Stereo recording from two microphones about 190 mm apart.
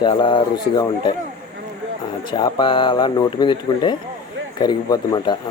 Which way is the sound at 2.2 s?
25° left (ahead or behind).